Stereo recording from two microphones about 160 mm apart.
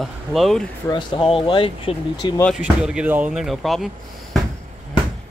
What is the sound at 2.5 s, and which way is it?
Speech, 5° right (ahead or behind).